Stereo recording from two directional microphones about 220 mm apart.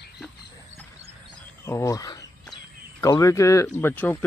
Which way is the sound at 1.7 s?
15° left (ahead or behind).